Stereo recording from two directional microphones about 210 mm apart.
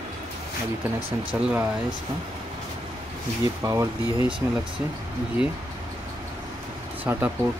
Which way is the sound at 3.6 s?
15° right (ahead or behind).